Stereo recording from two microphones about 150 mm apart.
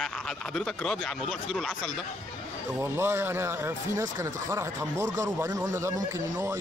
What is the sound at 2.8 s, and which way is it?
Speech, 15° right (ahead or behind).